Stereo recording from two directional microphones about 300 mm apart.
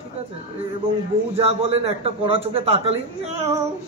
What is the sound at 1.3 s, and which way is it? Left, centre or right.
A man's voice, centre.